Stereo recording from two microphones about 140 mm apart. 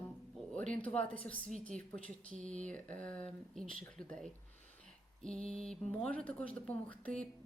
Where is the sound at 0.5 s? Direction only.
10° left (ahead or behind).